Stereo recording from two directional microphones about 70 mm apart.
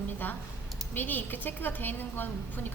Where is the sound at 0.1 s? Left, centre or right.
Left.